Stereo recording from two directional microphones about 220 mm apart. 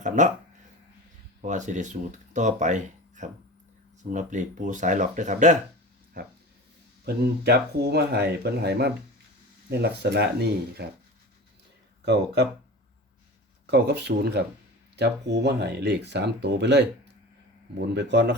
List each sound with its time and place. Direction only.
0.2 s speech: 35° right (ahead or behind)
1.4 s speech: 35° right (ahead or behind)
7.0 s speech: 45° right (ahead or behind)
12.0 s speech: 50° right (ahead or behind)
13.7 s speech: 50° right (ahead or behind)